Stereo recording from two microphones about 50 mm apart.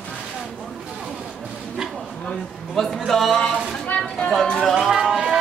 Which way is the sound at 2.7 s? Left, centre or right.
Centre.